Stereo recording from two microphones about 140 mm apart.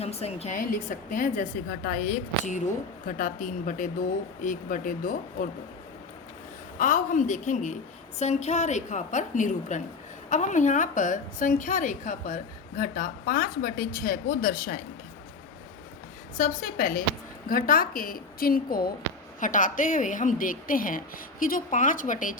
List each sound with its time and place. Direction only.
0.0 s a woman's voice: 50° left (ahead or behind)
0.5 s a woman's voice: 70° left (ahead or behind)
6.7 s a woman's voice: 65° left (ahead or behind)
16.4 s a woman's voice: 80° left
19.4 s a woman's voice: 70° left (ahead or behind)